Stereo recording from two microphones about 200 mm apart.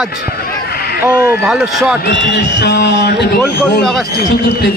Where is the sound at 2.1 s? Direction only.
55° left (ahead or behind).